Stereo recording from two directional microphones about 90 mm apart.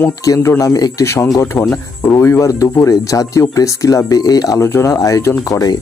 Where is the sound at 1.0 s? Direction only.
30° left (ahead or behind).